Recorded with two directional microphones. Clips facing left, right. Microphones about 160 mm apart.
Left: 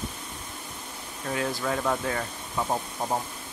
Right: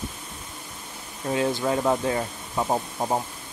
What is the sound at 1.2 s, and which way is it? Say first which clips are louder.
Speech: right 5 dB; 25° right (ahead or behind).